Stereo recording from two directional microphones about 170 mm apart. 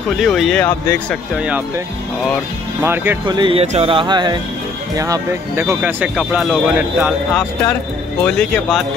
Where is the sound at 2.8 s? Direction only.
10° right (ahead or behind).